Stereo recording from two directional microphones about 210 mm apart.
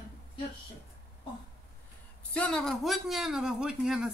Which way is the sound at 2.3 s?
5° left (ahead or behind).